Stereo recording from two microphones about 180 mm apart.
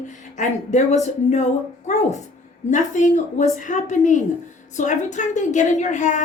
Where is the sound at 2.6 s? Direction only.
40° left (ahead or behind).